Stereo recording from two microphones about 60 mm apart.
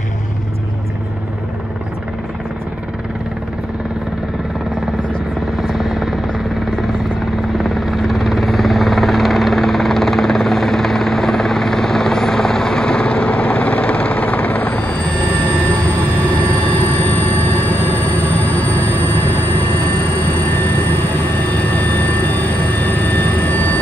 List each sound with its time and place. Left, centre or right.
5.6 s helicopter: centre
7.5 s helicopter: centre; by 14.9 s left
16.6 s a sound: left